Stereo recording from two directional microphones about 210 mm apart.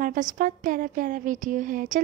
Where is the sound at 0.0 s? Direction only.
40° right (ahead or behind).